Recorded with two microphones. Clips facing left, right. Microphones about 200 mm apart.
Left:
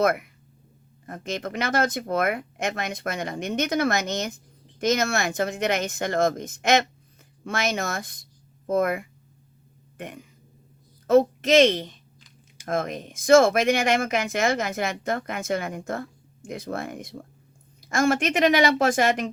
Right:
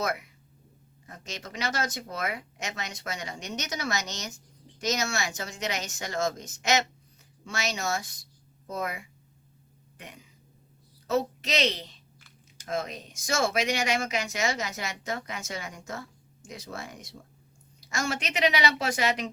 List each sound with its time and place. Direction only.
0.0 s a woman's voice: 55° left (ahead or behind)